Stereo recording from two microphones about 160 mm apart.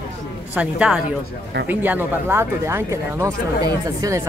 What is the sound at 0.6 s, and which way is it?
Speech, 5° right (ahead or behind).